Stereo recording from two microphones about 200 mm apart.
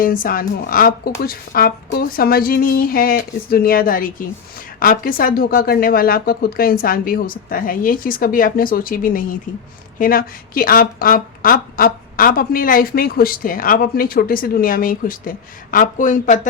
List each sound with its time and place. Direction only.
0.0 s a woman's voice: 45° left (ahead or behind)